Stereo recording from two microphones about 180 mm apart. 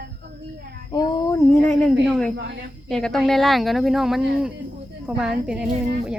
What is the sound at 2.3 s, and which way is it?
Speech, 75° right (ahead or behind).